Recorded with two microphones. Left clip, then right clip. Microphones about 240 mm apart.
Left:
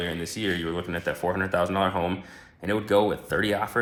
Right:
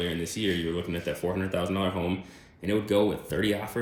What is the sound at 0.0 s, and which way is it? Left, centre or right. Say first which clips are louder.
Speech: even; centre.